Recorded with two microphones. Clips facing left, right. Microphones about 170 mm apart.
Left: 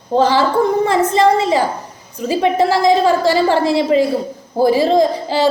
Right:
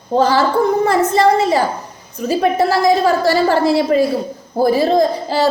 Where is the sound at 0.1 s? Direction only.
20° left (ahead or behind).